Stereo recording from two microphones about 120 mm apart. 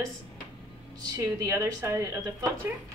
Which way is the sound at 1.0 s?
25° right (ahead or behind).